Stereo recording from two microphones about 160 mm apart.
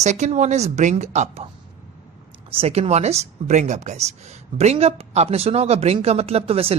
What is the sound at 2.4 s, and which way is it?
Speech, 40° right (ahead or behind).